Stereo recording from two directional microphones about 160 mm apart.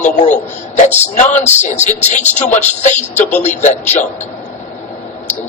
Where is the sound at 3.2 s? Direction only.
10° left (ahead or behind).